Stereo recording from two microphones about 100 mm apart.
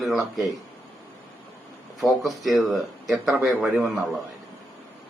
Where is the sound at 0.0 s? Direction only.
Centre (ahead or behind).